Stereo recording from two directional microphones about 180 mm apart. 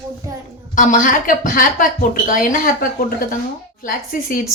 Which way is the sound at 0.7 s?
50° left (ahead or behind).